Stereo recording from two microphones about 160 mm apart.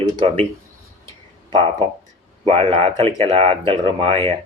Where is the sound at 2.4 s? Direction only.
40° right (ahead or behind).